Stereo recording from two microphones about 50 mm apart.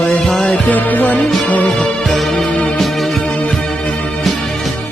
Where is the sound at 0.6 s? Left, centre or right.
Left.